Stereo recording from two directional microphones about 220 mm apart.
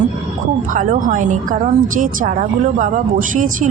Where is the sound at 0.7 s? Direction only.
35° right (ahead or behind).